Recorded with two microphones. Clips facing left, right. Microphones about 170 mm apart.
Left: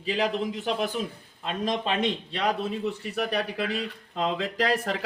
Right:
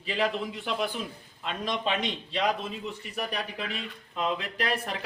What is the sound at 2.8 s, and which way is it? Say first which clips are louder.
Speech: left 6 dB; 70° left (ahead or behind).